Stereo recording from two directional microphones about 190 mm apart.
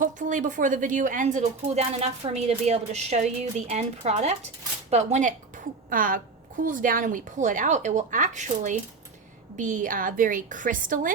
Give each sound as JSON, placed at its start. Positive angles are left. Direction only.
{"t": 0.0, "sound": "a woman's voice", "side_deg": -40}